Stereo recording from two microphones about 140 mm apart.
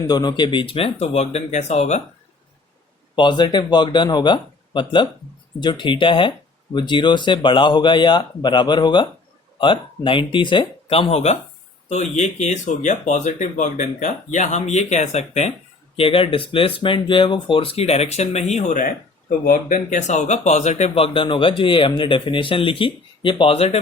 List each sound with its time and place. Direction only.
0.1 s speech: 30° left (ahead or behind); by 2.0 s 50° left (ahead or behind)
3.2 s speech: 35° left (ahead or behind); by 15.5 s 50° left (ahead or behind)
16.0 s speech: 40° left (ahead or behind)